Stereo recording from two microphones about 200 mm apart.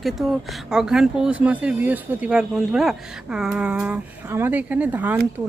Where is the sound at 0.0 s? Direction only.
Centre (ahead or behind).